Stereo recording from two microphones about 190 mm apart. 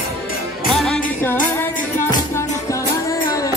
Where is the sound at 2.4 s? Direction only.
15° left (ahead or behind).